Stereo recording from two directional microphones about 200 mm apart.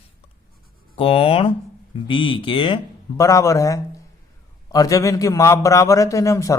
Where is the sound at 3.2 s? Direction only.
15° left (ahead or behind).